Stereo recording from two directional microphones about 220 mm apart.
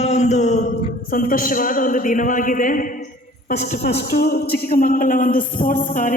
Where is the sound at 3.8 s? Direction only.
50° left (ahead or behind).